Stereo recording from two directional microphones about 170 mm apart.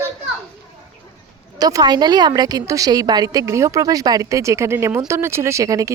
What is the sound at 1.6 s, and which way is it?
A woman's voice, 20° right (ahead or behind).